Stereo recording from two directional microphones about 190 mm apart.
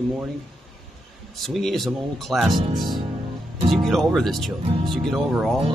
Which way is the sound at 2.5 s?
25° right (ahead or behind).